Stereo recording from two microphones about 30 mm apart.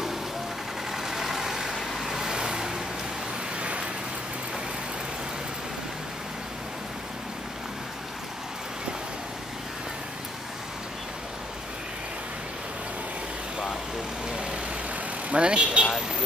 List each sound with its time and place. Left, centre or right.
0.9 s vehicle: centre
3.5 s vehicle: right
14.3 s vehicle: right
15.2 s speech: right